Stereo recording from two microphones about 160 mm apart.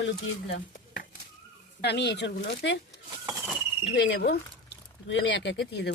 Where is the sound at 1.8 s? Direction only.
90° left.